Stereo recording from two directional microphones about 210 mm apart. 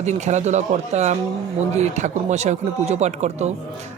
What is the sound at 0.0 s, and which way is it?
Speech, 35° right (ahead or behind).